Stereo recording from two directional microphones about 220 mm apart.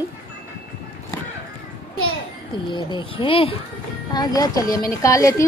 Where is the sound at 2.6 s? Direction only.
20° left (ahead or behind).